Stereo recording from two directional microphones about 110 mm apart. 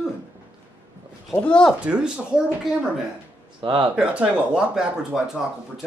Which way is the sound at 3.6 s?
50° right (ahead or behind).